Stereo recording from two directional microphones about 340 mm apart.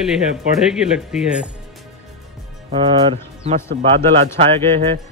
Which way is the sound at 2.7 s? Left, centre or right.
Centre.